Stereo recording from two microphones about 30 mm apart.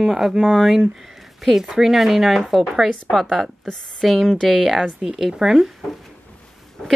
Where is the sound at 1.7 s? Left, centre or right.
Centre.